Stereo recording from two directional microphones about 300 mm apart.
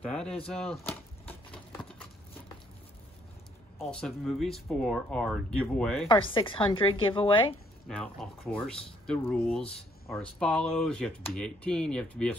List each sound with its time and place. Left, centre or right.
0.0 s speech: centre
0.5 s a sound: centre
3.7 s speech: centre
6.0 s a woman's voice: centre
7.9 s speech: centre